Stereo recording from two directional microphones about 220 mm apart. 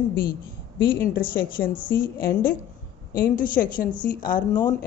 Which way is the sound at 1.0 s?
40° left (ahead or behind).